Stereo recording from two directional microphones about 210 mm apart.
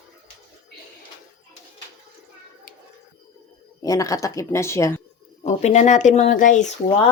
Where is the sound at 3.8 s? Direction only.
15° left (ahead or behind).